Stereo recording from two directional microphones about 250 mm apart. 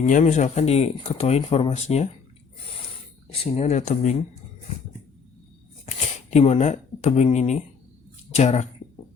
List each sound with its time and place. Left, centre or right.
0.0 s speech: left
3.4 s speech: left
6.3 s speech: left